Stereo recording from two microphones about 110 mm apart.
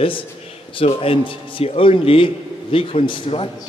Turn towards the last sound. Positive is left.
turn(degrees=50)  # may be behind; listen again after turning